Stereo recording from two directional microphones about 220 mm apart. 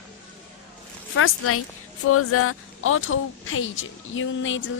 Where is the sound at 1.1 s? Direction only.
75° left (ahead or behind).